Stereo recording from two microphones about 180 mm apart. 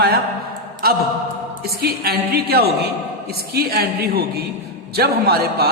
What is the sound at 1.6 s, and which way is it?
A man's voice, 60° right (ahead or behind).